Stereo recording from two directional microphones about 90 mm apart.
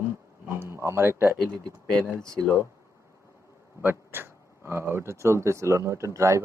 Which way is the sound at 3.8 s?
25° right (ahead or behind).